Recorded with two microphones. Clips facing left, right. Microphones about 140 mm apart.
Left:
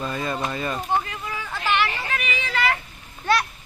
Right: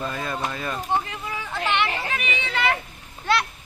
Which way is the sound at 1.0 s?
25° right (ahead or behind).